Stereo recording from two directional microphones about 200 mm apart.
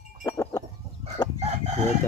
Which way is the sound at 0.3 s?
15° left (ahead or behind).